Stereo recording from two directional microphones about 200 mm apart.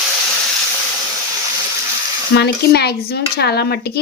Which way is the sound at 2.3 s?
55° left (ahead or behind).